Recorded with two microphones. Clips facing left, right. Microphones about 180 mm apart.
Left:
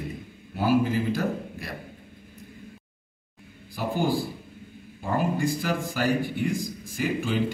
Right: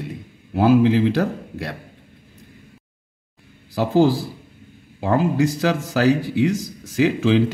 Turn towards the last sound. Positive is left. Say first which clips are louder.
# right 9 dB
turn(degrees=-90)